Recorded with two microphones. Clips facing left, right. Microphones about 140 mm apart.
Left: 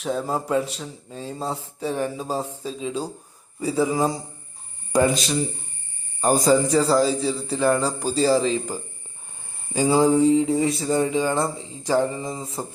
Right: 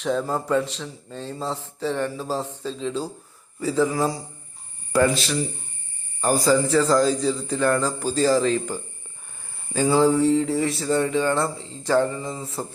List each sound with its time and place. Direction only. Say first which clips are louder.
0.0 s a man's voice: right 1 dB; 5° left (ahead or behind)
9.7 s a man's voice: left 1 dB; 15° left (ahead or behind)